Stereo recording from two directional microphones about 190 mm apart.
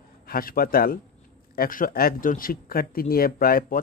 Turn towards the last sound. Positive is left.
turn(degrees=50)  # may be behind; listen again after turning